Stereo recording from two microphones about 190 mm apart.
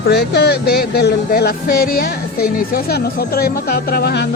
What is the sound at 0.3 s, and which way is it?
Speech, 60° left (ahead or behind).